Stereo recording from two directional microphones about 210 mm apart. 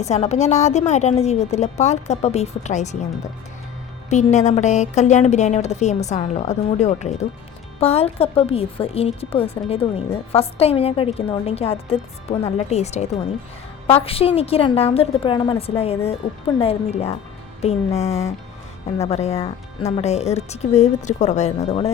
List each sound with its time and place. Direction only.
0.0 s a woman's voice: 30° left (ahead or behind)
4.1 s a woman's voice: 35° left (ahead or behind)